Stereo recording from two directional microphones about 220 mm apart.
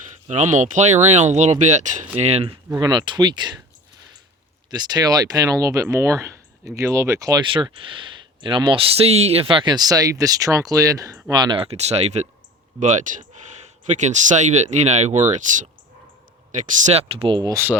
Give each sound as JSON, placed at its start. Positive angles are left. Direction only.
{"t": 0.3, "sound": "speech", "side_deg": -30}
{"t": 4.7, "sound": "speech", "side_deg": -20}